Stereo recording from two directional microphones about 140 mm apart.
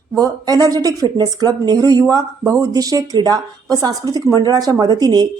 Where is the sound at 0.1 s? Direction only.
25° right (ahead or behind).